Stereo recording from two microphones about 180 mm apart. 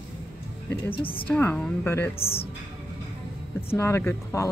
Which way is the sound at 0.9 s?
30° left (ahead or behind).